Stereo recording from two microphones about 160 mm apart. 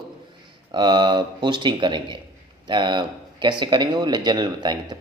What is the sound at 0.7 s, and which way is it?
A man's voice, 30° right (ahead or behind).